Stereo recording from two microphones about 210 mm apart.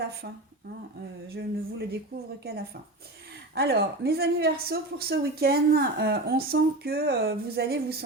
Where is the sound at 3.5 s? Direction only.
50° right (ahead or behind).